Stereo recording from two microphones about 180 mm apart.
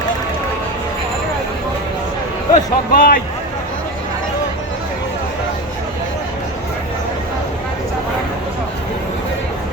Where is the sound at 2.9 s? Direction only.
55° left (ahead or behind).